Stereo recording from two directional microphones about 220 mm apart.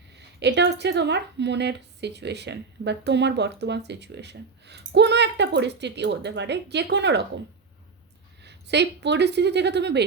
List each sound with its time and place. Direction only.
0.3 s a woman's voice: 50° right (ahead or behind)
8.4 s a woman's voice: 50° right (ahead or behind)